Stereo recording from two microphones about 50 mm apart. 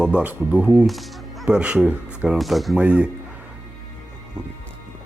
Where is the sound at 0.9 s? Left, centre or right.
Centre.